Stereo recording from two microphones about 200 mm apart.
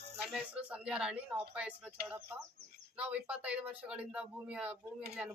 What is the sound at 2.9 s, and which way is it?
Speech, 5° right (ahead or behind).